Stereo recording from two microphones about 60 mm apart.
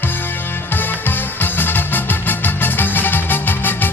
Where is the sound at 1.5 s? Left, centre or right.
Left.